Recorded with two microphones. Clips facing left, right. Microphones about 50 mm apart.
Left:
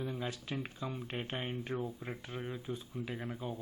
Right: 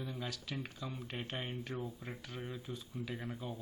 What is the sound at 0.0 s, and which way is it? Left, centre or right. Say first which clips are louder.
Speech: left 4 dB; centre.